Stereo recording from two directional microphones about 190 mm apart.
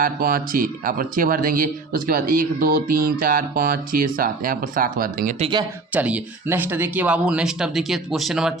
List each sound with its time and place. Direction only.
0.0 s speech: 50° right (ahead or behind)
5.4 s speech: 25° right (ahead or behind)
5.9 s speech: 5° right (ahead or behind)